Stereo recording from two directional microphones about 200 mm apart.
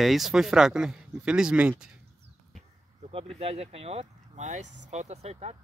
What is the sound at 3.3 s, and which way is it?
Speech, 30° right (ahead or behind).